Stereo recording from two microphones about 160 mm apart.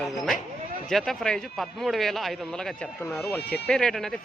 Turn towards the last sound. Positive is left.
turn(degrees=5)  # may be behind; listen again after turning